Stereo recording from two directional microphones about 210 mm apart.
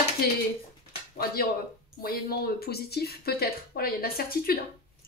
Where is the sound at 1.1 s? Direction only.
45° left (ahead or behind).